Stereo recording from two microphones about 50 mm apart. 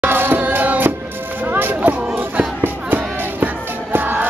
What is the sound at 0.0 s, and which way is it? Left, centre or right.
Music, right.